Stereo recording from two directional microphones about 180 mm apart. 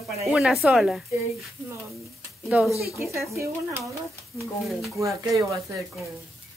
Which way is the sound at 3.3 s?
15° right (ahead or behind).